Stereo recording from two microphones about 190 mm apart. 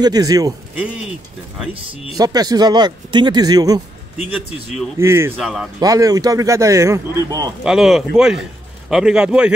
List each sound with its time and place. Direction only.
0.0 s speech: 20° right (ahead or behind)
2.1 s speech: 20° right (ahead or behind)
4.9 s a man's voice: 15° right (ahead or behind)
5.4 s speech: centre (ahead or behind)
5.8 s a man's voice: 20° right (ahead or behind)
7.6 s speech: centre (ahead or behind)